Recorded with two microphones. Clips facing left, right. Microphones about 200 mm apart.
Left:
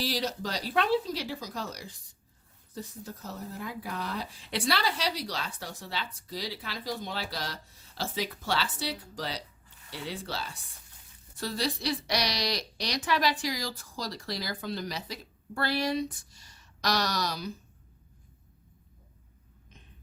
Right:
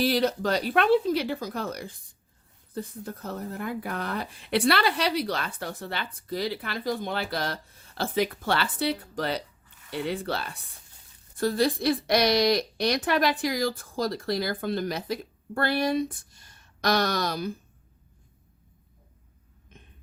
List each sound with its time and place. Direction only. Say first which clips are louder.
0.0 s a woman's voice: right 8 dB; 55° right (ahead or behind)